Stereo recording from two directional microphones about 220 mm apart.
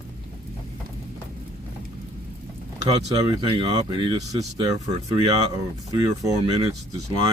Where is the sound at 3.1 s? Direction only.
20° right (ahead or behind).